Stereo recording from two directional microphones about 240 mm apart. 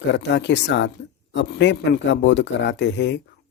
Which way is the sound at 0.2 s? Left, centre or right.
Left.